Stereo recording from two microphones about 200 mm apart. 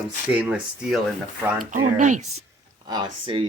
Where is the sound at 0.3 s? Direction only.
5° right (ahead or behind).